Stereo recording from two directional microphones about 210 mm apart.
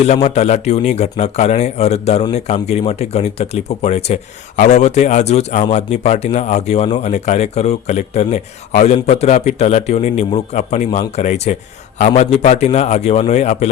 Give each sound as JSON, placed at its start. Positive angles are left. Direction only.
{"t": 0.3, "sound": "speech", "side_deg": 35}